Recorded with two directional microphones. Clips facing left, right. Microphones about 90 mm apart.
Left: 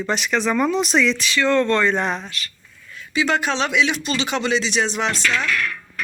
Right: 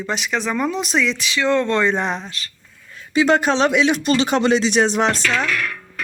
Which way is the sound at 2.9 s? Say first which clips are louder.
Right 5 dB; 40° right (ahead or behind).